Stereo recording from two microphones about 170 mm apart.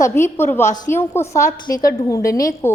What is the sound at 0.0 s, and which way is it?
A woman's voice, 15° left (ahead or behind).